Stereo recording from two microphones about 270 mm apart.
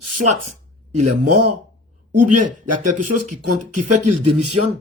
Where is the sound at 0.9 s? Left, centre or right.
Right.